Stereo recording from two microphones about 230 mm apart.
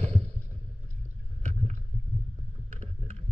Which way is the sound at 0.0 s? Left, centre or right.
Right.